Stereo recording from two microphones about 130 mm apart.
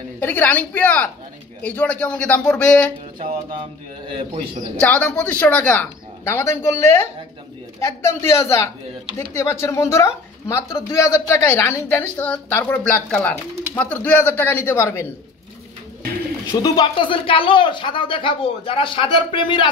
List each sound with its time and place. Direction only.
0.2 s a woman's voice: 15° left (ahead or behind)
4.7 s a woman's voice: 10° left (ahead or behind)
16.6 s speech: 40° left (ahead or behind)